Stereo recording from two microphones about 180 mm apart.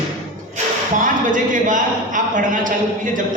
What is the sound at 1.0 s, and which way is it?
A man's voice, 45° right (ahead or behind).